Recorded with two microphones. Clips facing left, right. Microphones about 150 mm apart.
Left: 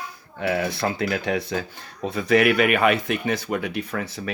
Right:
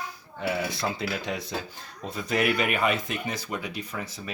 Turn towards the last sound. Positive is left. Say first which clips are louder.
# left 7 dB
turn(degrees=70)  # may be behind; listen again after turning